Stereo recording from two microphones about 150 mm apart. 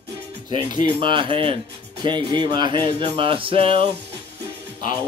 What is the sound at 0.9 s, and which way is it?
Speech, 35° right (ahead or behind).